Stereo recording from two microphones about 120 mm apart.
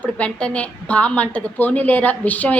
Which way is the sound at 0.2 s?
10° left (ahead or behind).